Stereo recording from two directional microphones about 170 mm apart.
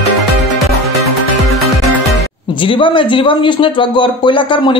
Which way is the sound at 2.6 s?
30° left (ahead or behind).